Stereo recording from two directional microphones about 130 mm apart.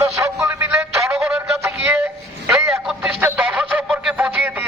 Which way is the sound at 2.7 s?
5° right (ahead or behind).